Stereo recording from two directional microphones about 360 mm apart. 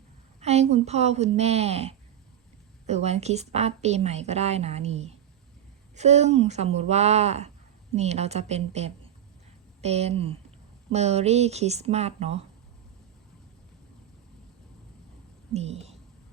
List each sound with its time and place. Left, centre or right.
0.3 s a woman's voice: centre
15.5 s speech: centre